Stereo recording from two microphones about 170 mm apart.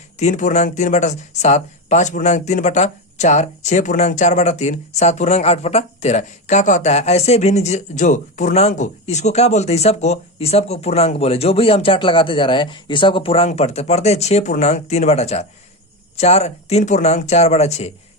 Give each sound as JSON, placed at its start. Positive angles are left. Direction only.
{"t": 0.2, "sound": "speech", "side_deg": 45}